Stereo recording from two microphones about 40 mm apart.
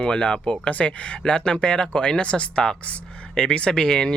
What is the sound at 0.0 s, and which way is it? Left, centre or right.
Speech, left.